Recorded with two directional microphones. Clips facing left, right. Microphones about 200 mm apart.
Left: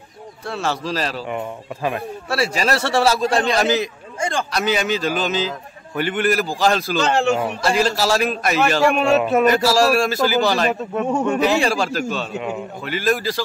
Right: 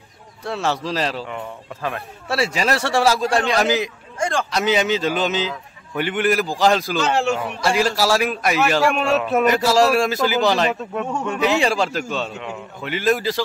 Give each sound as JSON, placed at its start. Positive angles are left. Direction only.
{"t": 0.5, "sound": "a man's voice", "side_deg": -20}
{"t": 1.3, "sound": "speech", "side_deg": 15}
{"t": 2.2, "sound": "a man's voice", "side_deg": -25}
{"t": 4.2, "sound": "a man's voice", "side_deg": 0}
{"t": 4.5, "sound": "a man's voice", "side_deg": -20}
{"t": 7.1, "sound": "a man's voice", "side_deg": 0}
{"t": 8.8, "sound": "a man's voice", "side_deg": 0}
{"t": 9.5, "sound": "a man's voice", "side_deg": -20}
{"t": 12.2, "sound": "speech", "side_deg": 15}
{"t": 12.8, "sound": "a man's voice", "side_deg": -20}